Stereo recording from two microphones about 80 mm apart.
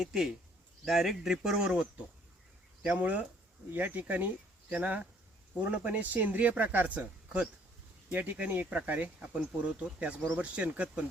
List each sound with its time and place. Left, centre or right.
0.0 s speech: centre